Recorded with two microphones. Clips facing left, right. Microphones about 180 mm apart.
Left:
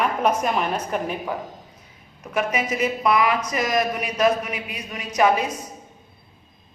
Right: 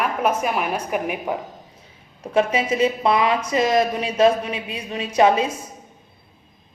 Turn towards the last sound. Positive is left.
turn(degrees=-25)  # may be behind; listen again after turning